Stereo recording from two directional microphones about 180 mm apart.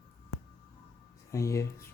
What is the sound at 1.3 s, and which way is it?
Speech, 15° left (ahead or behind).